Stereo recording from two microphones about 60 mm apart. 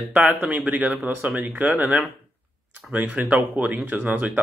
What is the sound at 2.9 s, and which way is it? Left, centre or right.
Speech, right.